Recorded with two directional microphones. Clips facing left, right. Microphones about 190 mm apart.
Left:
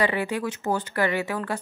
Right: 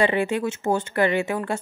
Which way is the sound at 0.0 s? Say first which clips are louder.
Right 3 dB; 25° right (ahead or behind).